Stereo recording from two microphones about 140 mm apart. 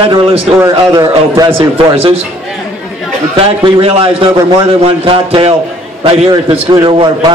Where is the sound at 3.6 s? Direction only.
40° right (ahead or behind).